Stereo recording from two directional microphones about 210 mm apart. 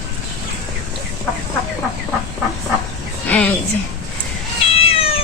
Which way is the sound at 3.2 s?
5° left (ahead or behind).